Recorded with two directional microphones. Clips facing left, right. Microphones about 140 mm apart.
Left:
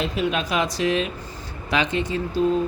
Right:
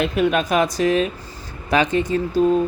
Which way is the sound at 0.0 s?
55° right (ahead or behind).